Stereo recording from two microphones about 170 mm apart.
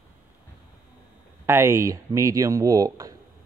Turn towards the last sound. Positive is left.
turn(degrees=-20)  # may be behind; listen again after turning